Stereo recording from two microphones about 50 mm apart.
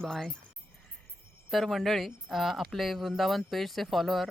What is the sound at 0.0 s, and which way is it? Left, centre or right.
Speech, centre.